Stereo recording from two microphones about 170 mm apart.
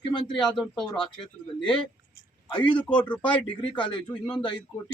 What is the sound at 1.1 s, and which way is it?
Speech, 30° left (ahead or behind).